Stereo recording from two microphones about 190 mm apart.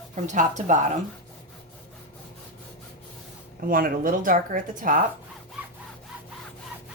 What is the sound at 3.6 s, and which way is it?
A woman's voice, 45° right (ahead or behind).